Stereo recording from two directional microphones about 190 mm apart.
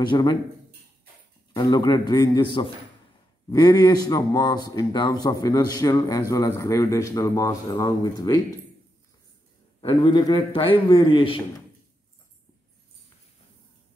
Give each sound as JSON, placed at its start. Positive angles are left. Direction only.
{"t": 0.0, "sound": "a man's voice", "side_deg": 25}
{"t": 1.5, "sound": "a man's voice", "side_deg": 20}
{"t": 9.8, "sound": "a man's voice", "side_deg": 25}